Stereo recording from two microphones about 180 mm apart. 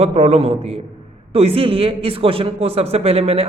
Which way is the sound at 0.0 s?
35° right (ahead or behind).